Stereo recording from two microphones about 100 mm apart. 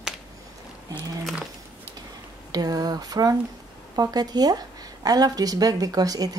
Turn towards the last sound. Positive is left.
turn(degrees=-40)  # may be behind; listen again after turning